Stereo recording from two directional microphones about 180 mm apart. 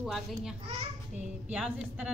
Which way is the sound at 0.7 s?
35° right (ahead or behind).